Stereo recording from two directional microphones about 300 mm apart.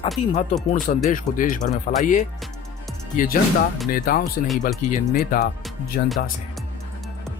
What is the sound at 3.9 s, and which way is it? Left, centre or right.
Speech, left.